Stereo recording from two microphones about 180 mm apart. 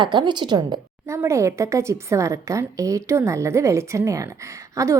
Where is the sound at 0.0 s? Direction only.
25° right (ahead or behind).